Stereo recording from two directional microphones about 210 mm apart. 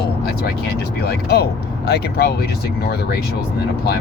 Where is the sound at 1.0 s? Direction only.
50° left (ahead or behind).